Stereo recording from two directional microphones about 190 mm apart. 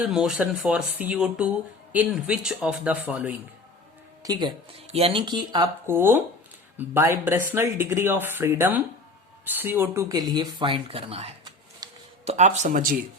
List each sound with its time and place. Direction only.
0.0 s speech: 5° right (ahead or behind)
4.2 s speech: 20° right (ahead or behind); by 13.0 s 45° right (ahead or behind)